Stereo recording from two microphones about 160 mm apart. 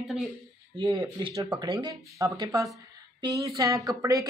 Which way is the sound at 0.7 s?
30° right (ahead or behind).